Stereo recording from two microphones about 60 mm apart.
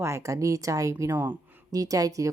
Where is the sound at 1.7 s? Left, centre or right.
Right.